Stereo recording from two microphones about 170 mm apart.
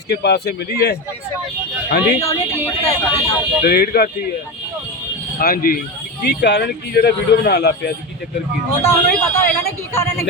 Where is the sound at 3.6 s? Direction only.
65° left (ahead or behind).